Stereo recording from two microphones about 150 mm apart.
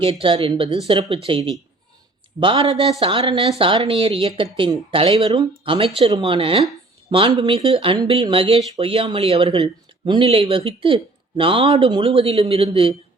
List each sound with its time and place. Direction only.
0.0 s speech: 40° right (ahead or behind)